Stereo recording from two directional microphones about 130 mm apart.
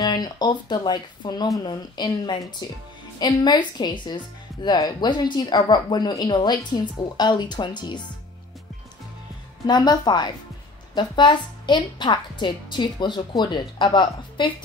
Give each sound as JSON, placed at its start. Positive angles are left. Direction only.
{"t": 0.0, "sound": "a woman's voice", "side_deg": 30}
{"t": 9.7, "sound": "a woman's voice", "side_deg": 35}